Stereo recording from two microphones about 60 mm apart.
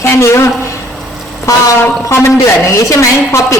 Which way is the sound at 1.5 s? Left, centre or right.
Left.